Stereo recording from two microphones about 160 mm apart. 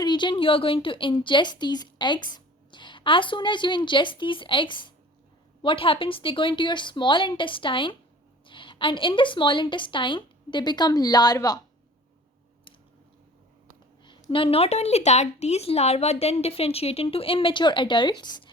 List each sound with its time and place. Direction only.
0.0 s speech: 30° left (ahead or behind)
14.0 s speech: 30° left (ahead or behind)